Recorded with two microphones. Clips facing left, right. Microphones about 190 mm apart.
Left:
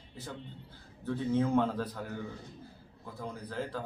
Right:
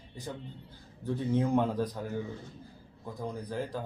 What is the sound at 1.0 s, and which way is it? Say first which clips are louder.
Speech: right 1 dB; 15° right (ahead or behind).